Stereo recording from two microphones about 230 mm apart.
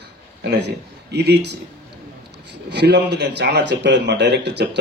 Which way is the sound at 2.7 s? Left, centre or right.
Right.